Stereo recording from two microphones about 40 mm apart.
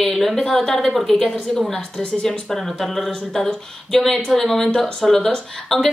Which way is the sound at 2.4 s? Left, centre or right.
Centre.